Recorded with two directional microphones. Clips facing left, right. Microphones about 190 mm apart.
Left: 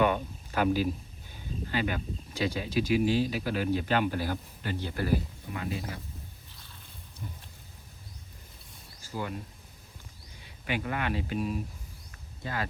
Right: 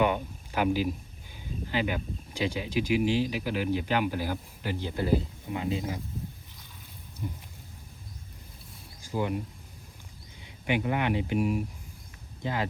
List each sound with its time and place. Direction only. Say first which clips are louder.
0.0 s speech: even; 15° right (ahead or behind)
9.0 s a sound: right 6 dB; 15° right (ahead or behind)
10.4 s speech: right 5 dB; 20° right (ahead or behind)